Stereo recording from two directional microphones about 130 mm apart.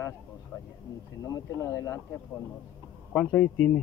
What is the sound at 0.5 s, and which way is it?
Speech, 15° left (ahead or behind).